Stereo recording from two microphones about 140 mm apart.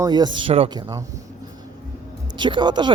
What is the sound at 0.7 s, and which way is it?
Speech, 30° right (ahead or behind).